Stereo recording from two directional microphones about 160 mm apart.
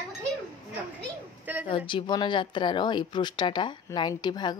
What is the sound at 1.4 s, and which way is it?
Speech, 10° right (ahead or behind).